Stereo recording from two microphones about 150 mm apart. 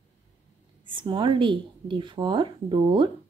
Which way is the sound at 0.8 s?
30° right (ahead or behind).